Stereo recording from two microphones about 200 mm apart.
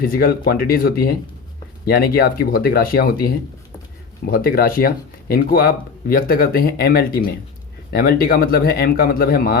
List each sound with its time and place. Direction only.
0.0 s speech: 45° left (ahead or behind)